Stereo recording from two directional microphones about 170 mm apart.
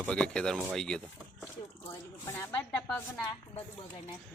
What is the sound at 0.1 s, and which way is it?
Speech, 5° left (ahead or behind).